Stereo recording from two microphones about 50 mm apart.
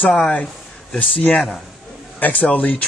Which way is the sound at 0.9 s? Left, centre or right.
Left.